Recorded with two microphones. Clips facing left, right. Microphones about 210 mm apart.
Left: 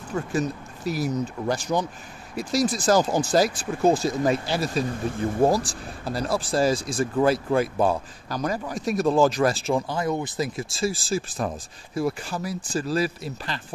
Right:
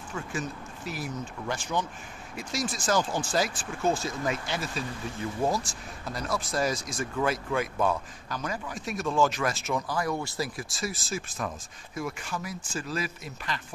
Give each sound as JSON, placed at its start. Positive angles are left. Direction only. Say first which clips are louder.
{"t": 0.1, "sound": "speech", "louder": "left 8 dB", "side_deg": 40}